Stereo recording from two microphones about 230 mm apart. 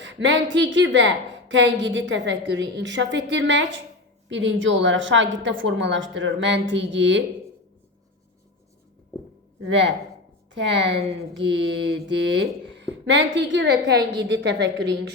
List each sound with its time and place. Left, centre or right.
0.0 s a woman's voice: right
9.6 s a woman's voice: right
12.0 s a woman's voice: right